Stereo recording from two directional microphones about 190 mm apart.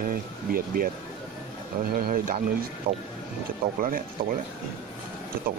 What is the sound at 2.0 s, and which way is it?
Speech, 50° right (ahead or behind).